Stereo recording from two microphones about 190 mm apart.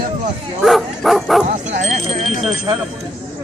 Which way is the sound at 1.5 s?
35° right (ahead or behind).